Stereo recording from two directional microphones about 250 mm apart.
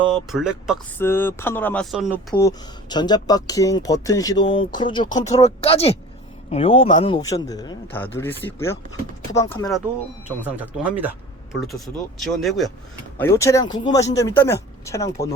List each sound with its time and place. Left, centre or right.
0.1 s speech: centre
0.9 s speech: centre
2.3 s speech: centre
10.2 s speech: centre
12.2 s speech: centre
13.1 s speech: centre